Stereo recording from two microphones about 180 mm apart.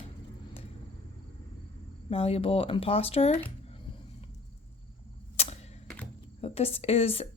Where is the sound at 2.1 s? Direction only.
30° left (ahead or behind).